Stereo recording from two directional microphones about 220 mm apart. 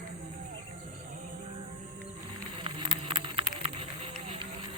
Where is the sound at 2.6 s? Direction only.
20° right (ahead or behind).